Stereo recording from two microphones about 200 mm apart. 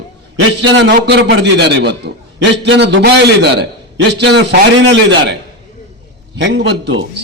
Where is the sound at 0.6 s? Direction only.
60° right (ahead or behind).